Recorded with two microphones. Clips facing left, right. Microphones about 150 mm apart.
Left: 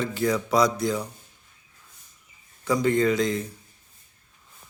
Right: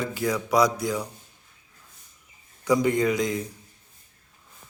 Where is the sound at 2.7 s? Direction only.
15° right (ahead or behind).